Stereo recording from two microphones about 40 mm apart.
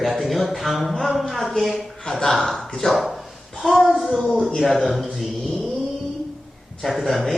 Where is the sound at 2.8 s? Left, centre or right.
Left.